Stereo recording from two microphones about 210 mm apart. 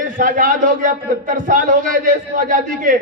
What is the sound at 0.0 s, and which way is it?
A man's voice, 40° right (ahead or behind).